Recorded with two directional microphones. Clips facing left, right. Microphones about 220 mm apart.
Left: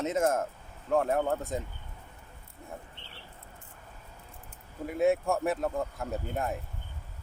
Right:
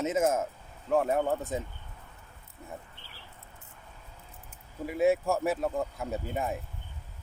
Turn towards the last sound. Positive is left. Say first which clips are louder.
# even
turn(degrees=0)  # may be behind; listen again after turning